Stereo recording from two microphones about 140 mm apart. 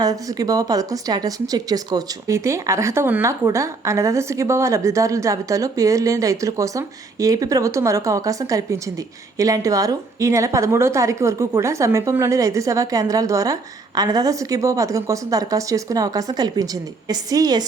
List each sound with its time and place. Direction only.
0.0 s a woman's voice: 25° right (ahead or behind)